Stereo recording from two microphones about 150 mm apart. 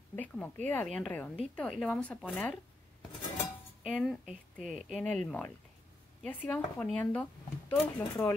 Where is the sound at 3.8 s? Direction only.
Centre (ahead or behind).